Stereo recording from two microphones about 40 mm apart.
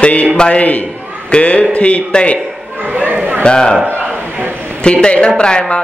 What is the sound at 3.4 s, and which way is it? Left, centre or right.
Speech, centre.